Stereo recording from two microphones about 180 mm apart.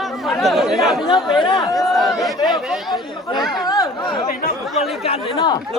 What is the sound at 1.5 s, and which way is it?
Speech, 20° left (ahead or behind).